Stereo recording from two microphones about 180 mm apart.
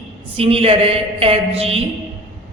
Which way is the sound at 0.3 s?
30° right (ahead or behind).